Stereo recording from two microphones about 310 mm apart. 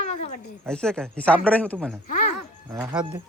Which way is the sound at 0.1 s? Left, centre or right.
Left.